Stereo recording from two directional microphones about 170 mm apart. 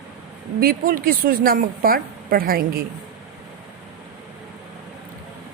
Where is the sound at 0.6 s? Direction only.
55° right (ahead or behind).